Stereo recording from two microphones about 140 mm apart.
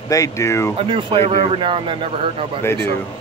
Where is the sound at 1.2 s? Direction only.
50° right (ahead or behind).